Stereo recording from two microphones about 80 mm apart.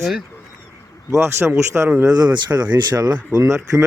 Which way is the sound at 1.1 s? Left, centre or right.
Right.